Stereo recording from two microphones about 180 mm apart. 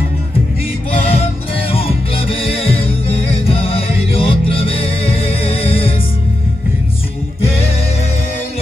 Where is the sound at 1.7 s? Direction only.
30° left (ahead or behind).